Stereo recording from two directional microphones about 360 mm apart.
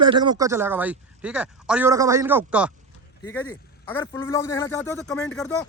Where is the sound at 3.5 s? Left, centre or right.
Centre.